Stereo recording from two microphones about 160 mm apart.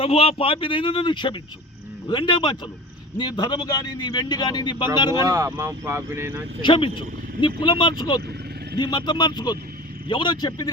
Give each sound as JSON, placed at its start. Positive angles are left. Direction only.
{"t": 0.0, "sound": "a man's voice", "side_deg": 35}
{"t": 5.2, "sound": "speech", "side_deg": -20}
{"t": 6.6, "sound": "a man's voice", "side_deg": 30}